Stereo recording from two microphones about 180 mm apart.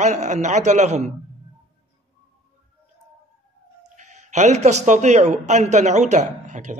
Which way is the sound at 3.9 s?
40° right (ahead or behind).